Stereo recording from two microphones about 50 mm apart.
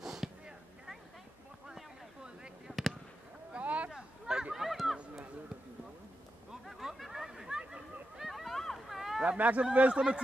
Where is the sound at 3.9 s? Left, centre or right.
Centre.